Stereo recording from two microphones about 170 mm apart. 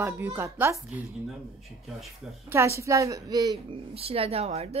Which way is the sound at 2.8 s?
20° right (ahead or behind).